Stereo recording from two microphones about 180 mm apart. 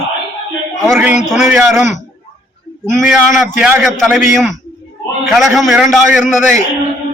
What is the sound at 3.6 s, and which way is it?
Speech, 5° right (ahead or behind).